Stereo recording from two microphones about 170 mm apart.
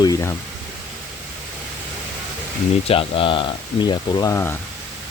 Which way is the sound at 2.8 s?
30° left (ahead or behind).